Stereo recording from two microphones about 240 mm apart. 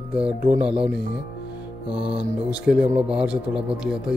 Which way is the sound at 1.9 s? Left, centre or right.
Right.